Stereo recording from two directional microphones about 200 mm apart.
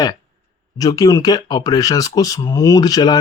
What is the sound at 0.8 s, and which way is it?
Speech, 20° left (ahead or behind).